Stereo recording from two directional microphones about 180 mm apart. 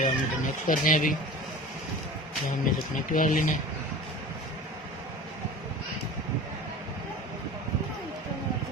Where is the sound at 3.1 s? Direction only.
45° left (ahead or behind).